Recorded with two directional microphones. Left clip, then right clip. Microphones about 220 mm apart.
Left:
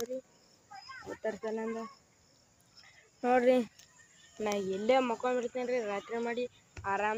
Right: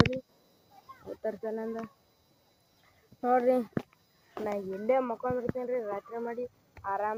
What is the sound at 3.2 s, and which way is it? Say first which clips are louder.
Speech: right 1 dB; 15° left (ahead or behind).